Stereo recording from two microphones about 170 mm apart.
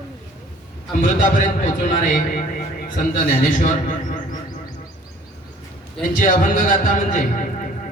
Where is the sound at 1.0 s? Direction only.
50° left (ahead or behind).